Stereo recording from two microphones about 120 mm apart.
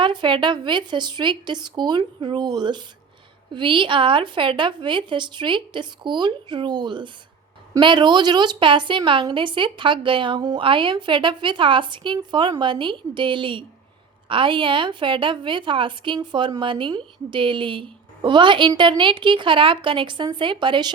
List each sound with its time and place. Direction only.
0.0 s a woman's voice: 40° right (ahead or behind)